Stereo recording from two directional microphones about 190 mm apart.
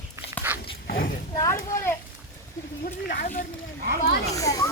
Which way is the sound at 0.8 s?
50° left (ahead or behind).